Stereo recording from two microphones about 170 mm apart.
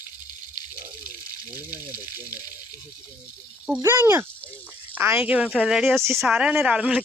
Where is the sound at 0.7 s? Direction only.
50° right (ahead or behind).